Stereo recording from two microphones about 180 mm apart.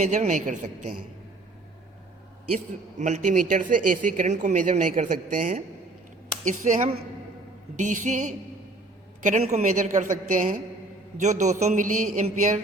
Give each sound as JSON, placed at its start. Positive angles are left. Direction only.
{"t": 0.0, "sound": "a woman's voice", "side_deg": -40}
{"t": 3.0, "sound": "a woman's voice", "side_deg": -45}